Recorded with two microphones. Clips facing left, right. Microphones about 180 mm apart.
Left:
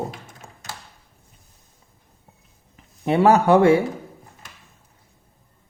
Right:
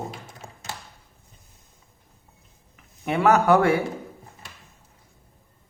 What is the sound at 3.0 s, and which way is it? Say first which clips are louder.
Speech: left 3 dB; 30° left (ahead or behind).